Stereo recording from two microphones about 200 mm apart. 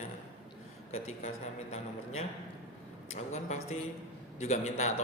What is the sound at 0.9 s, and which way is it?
Speech, 35° left (ahead or behind).